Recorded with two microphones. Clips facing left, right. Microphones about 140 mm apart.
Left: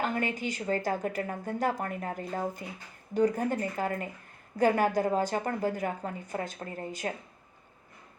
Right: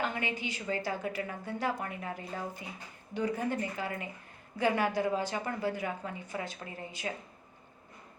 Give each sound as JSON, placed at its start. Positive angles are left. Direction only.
{"t": 0.0, "sound": "a woman's voice", "side_deg": 45}